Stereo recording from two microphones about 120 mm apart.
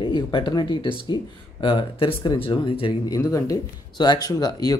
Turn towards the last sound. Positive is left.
turn(degrees=30)  # may be behind; listen again after turning